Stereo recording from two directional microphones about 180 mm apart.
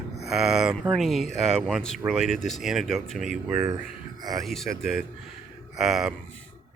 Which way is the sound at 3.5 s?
20° right (ahead or behind).